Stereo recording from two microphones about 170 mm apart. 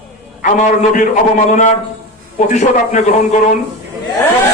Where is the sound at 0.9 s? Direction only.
50° left (ahead or behind).